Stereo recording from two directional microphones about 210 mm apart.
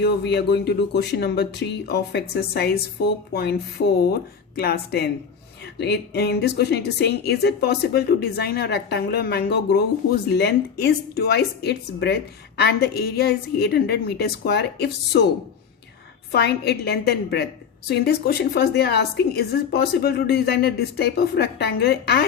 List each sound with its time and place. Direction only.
0.0 s speech: 55° left (ahead or behind)
16.3 s speech: 50° left (ahead or behind)